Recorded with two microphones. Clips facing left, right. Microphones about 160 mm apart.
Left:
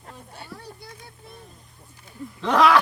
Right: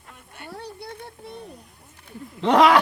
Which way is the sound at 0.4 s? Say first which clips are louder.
Right 8 dB; 65° right (ahead or behind).